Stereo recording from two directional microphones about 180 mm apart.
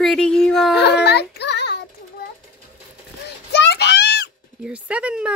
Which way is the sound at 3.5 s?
70° left (ahead or behind).